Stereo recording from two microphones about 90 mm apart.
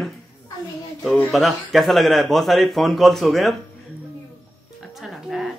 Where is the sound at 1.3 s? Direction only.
Centre (ahead or behind).